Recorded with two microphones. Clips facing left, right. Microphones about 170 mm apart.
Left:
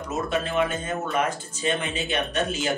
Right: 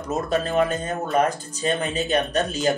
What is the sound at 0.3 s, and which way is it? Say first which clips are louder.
Speech: right 4 dB; 40° right (ahead or behind).